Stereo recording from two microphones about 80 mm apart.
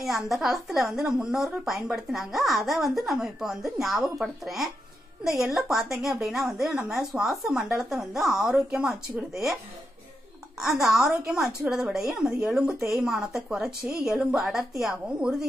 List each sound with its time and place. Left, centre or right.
0.0 s a woman's voice: centre
10.8 s a woman's voice: centre